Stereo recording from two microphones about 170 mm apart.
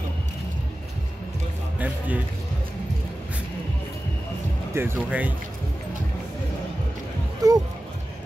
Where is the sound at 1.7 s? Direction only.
10° right (ahead or behind).